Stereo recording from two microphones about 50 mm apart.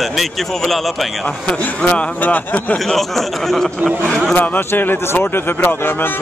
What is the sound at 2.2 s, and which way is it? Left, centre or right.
Speech, left.